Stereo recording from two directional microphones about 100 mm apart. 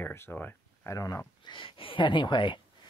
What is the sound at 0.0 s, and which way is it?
Speech, 25° left (ahead or behind).